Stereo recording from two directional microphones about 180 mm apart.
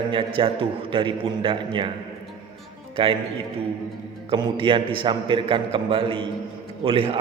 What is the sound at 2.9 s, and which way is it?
Speech, 30° right (ahead or behind).